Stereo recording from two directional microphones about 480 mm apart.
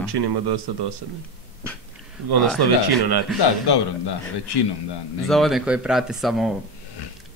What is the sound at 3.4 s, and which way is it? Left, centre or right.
A man's voice, left.